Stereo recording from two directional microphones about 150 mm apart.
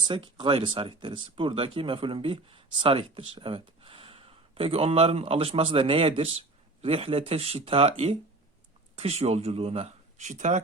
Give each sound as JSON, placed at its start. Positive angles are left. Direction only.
{"t": 0.0, "sound": "speech", "side_deg": -30}